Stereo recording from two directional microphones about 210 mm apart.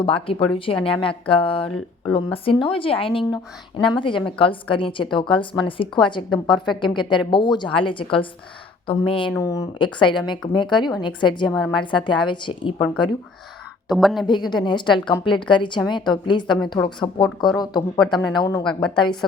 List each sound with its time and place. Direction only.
0.0 s a woman's voice: 25° left (ahead or behind)
9.3 s a woman's voice: 15° left (ahead or behind)
13.8 s a woman's voice: centre (ahead or behind)
14.5 s a woman's voice: 20° left (ahead or behind)